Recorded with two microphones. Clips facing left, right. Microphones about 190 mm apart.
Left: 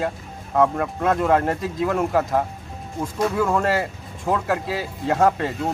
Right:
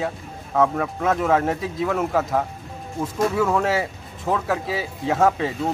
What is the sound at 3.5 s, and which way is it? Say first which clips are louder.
Speech: even; 5° right (ahead or behind).